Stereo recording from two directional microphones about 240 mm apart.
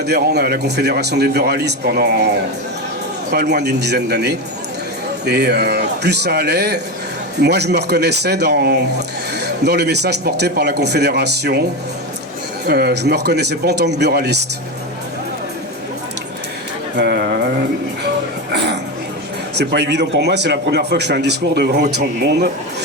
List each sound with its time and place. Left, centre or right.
0.0 s speech: right
12.6 s speech: right
17.0 s speech: right
19.5 s speech: right